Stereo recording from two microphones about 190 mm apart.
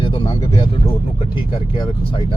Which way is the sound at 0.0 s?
25° left (ahead or behind).